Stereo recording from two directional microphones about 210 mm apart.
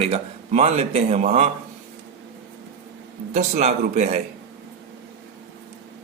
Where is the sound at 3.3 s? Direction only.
35° right (ahead or behind).